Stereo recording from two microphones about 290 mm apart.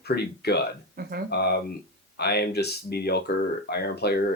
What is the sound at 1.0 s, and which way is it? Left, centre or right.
Speech, right.